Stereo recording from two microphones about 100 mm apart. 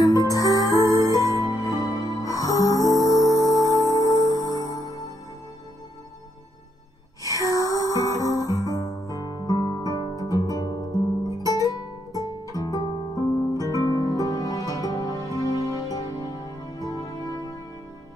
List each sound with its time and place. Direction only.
0.0 s music: 35° left (ahead or behind)
7.2 s music: 35° left (ahead or behind)